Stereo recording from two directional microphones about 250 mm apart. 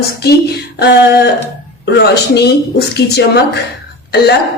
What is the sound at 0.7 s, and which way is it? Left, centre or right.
Speech, left.